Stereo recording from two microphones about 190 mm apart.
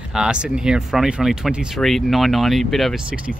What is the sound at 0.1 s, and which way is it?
Speech, 5° right (ahead or behind).